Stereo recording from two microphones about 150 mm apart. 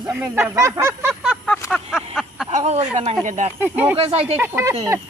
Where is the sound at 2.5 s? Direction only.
45° right (ahead or behind).